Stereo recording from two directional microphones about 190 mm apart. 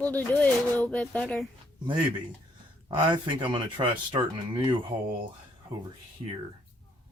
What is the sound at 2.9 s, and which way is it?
Speech, 25° right (ahead or behind).